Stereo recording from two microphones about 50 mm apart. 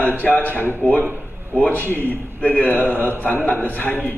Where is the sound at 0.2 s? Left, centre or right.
Left.